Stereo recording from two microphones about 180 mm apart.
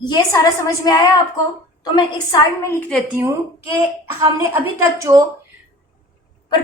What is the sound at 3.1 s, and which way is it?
A woman's voice, 15° right (ahead or behind).